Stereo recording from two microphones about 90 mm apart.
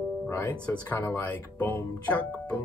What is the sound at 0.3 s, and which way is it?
Speech, 25° left (ahead or behind).